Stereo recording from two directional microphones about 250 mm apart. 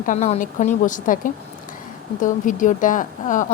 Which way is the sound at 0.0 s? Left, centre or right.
Left.